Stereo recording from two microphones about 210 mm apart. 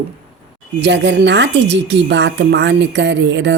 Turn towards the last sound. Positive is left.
turn(degrees=-60)  # may be behind; listen again after turning